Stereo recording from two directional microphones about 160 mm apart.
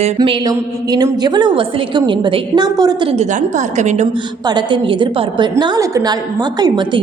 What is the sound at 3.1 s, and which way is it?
Speech, 50° right (ahead or behind).